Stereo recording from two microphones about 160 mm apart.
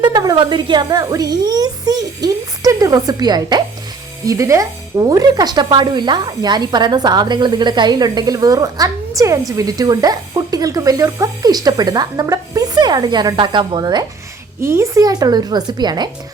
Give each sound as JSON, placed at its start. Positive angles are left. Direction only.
{"t": 0.0, "sound": "a woman's voice", "side_deg": -25}